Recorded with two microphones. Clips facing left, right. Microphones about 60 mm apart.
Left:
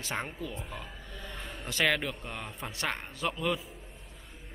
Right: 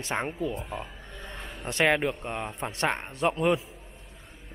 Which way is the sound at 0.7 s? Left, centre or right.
Right.